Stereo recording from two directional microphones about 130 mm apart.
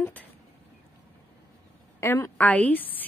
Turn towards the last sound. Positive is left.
turn(degrees=15)  # may be behind; listen again after turning